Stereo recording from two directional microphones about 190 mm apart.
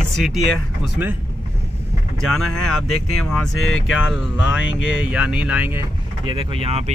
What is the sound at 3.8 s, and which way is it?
Speech, 5° right (ahead or behind).